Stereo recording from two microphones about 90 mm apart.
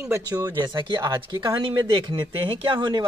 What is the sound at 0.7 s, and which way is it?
Speech, 55° right (ahead or behind).